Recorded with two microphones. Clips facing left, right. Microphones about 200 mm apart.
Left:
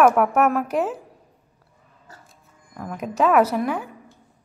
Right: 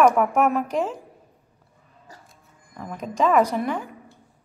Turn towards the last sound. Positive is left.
turn(degrees=5)  # may be behind; listen again after turning